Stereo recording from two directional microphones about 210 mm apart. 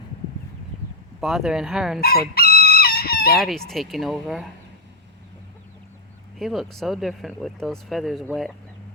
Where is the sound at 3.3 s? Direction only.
Centre (ahead or behind).